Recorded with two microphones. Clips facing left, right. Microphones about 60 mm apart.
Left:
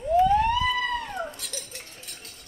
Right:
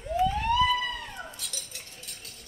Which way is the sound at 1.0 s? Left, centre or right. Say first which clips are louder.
Left 7 dB; left.